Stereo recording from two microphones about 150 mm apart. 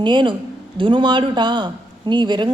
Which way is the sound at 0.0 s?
30° right (ahead or behind).